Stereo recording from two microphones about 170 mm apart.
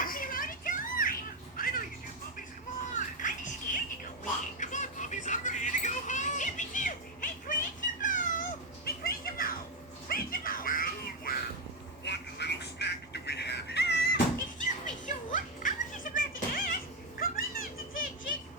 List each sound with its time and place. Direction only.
0.0 s children playing: 55° left (ahead or behind)
1.5 s vehicle: 55° left (ahead or behind)
3.2 s music: 50° left (ahead or behind)
4.6 s a sound: 45° left (ahead or behind)
8.0 s cat: 50° left (ahead or behind)
8.8 s music: 60° left (ahead or behind)
12.0 s music: 85° left
14.3 s children playing: 50° left (ahead or behind)